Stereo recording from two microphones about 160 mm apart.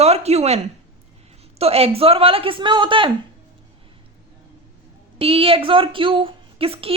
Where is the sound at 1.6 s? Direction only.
40° right (ahead or behind).